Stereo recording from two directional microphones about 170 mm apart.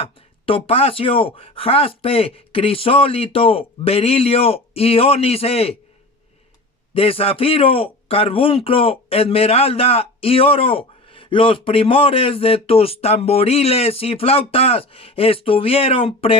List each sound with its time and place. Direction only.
0.0 s a man's voice: 35° left (ahead or behind)
6.9 s a man's voice: 35° left (ahead or behind)